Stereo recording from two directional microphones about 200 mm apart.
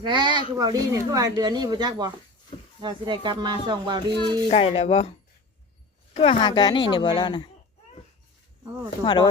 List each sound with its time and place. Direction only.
0.0 s speech: 25° right (ahead or behind)
4.4 s a woman's voice: 30° left (ahead or behind)
6.1 s a woman's voice: 25° left (ahead or behind)
9.0 s a woman's voice: 25° left (ahead or behind)